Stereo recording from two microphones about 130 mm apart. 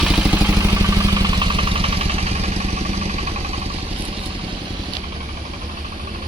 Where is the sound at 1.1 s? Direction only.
30° right (ahead or behind); by 3.2 s 55° right (ahead or behind).